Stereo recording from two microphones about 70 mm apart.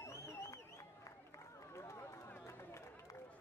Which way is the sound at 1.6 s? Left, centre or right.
Left.